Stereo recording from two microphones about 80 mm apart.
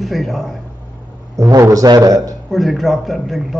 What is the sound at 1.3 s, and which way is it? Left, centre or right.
A man's voice, right.